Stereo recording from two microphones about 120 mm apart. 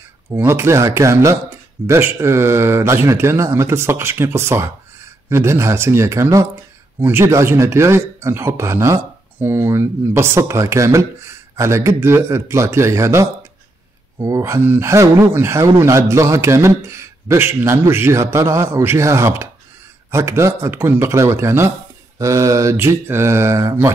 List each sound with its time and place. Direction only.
0.4 s speech: 20° right (ahead or behind)